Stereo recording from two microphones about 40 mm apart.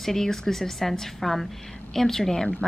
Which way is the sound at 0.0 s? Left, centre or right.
Centre.